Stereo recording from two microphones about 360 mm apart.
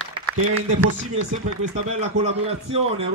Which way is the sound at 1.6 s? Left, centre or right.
Centre.